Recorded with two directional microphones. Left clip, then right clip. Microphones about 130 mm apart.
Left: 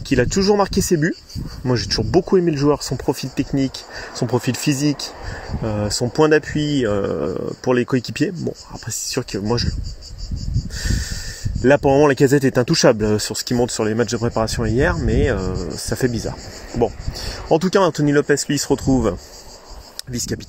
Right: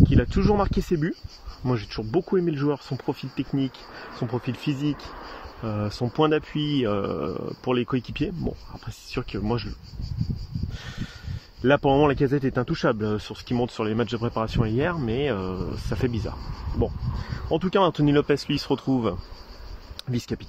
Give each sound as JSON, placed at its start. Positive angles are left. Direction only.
{"t": 0.1, "sound": "speech", "side_deg": 20}
{"t": 5.6, "sound": "speech", "side_deg": 10}
{"t": 11.6, "sound": "speech", "side_deg": 20}
{"t": 17.5, "sound": "speech", "side_deg": 30}
{"t": 18.1, "sound": "speech", "side_deg": 5}